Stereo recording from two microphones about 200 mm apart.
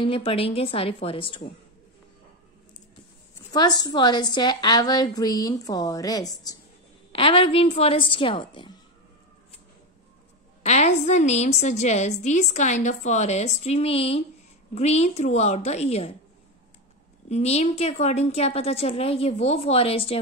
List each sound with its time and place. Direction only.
0.0 s a woman's voice: 30° left (ahead or behind)
3.5 s a woman's voice: 20° left (ahead or behind)
10.6 s a woman's voice: 35° left (ahead or behind)
17.3 s a woman's voice: 35° left (ahead or behind)